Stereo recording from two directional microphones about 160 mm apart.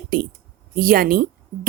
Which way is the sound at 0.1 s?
65° right (ahead or behind).